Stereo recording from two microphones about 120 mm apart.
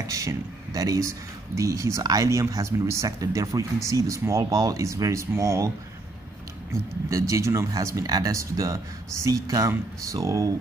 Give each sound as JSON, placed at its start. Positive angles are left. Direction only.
{"t": 0.0, "sound": "speech", "side_deg": -25}
{"t": 6.7, "sound": "speech", "side_deg": -25}